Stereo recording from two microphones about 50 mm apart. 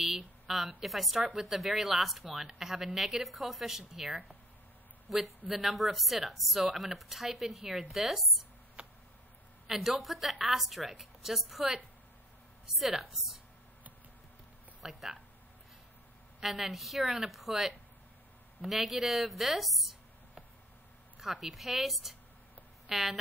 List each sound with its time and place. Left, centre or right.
0.5 s speech: centre
8.8 s a sound: right
9.7 s speech: centre
14.8 s speech: centre
16.3 s speech: centre
21.2 s a woman's voice: centre